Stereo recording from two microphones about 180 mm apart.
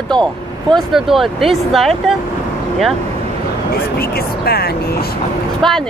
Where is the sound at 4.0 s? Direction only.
55° left (ahead or behind).